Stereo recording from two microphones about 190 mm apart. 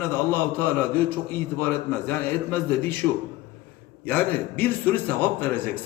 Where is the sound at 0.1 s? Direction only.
10° left (ahead or behind).